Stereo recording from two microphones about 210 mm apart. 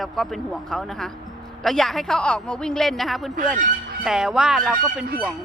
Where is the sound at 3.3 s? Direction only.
40° right (ahead or behind).